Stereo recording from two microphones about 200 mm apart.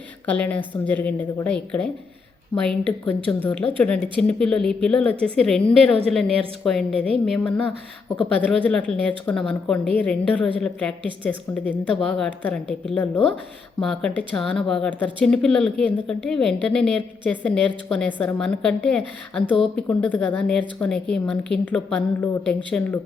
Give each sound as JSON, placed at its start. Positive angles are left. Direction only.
{"t": 0.3, "sound": "a woman's voice", "side_deg": 10}